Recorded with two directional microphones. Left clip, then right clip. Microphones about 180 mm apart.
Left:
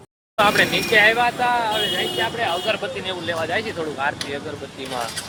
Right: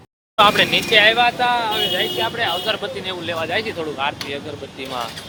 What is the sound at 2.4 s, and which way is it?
Speech, 10° right (ahead or behind).